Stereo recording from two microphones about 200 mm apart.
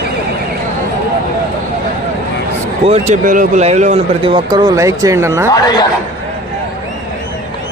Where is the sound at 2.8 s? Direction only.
35° right (ahead or behind); by 5.5 s 15° right (ahead or behind).